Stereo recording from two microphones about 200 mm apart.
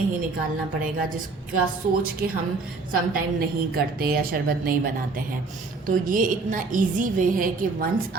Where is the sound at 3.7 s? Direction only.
50° right (ahead or behind).